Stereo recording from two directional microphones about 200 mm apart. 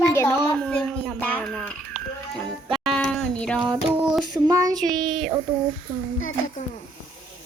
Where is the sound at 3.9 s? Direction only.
Centre (ahead or behind).